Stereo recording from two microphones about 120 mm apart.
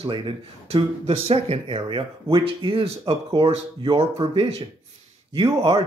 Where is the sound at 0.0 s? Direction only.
40° right (ahead or behind).